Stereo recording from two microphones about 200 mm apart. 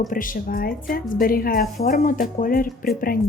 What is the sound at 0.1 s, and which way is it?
A woman's voice, 45° left (ahead or behind).